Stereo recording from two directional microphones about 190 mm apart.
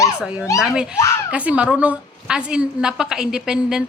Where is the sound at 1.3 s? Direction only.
5° right (ahead or behind).